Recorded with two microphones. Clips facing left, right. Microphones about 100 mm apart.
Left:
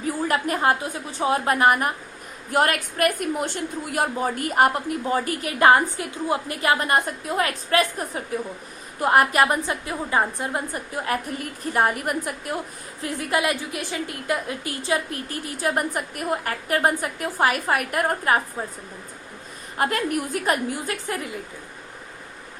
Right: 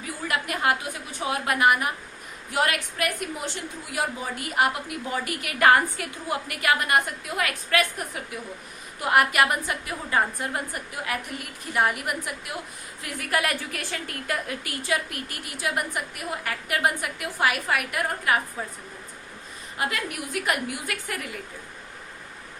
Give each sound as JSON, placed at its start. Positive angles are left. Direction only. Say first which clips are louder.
{"t": 0.0, "sound": "a woman's voice", "louder": "left 6 dB", "side_deg": 35}
{"t": 13.0, "sound": "a woman's voice", "louder": "left 3 dB", "side_deg": 30}
{"t": 19.8, "sound": "a woman's voice", "louder": "left 6 dB", "side_deg": 45}